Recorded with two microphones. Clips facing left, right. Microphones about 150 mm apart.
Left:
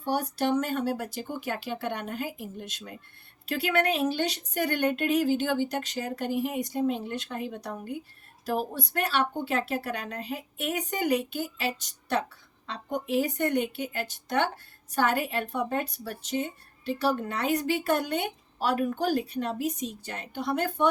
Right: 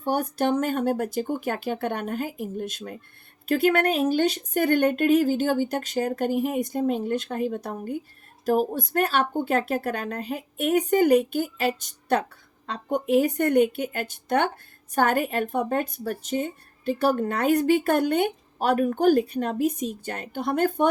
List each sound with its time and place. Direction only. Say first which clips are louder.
0.0 s speech: right 3 dB; 50° right (ahead or behind)